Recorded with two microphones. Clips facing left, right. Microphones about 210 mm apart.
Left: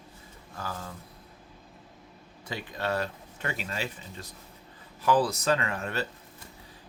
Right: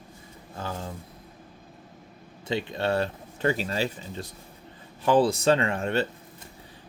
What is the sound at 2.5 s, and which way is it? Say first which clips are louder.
Speech: right 5 dB; 25° right (ahead or behind).